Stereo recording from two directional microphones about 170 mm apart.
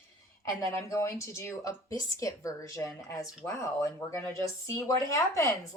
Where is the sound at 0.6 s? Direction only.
20° left (ahead or behind).